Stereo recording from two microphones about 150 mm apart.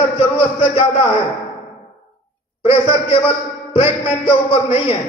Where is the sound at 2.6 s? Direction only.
40° left (ahead or behind).